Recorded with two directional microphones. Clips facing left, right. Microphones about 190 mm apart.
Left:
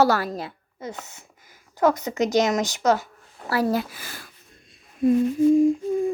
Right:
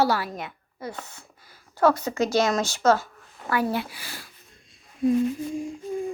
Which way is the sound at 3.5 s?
40° left (ahead or behind).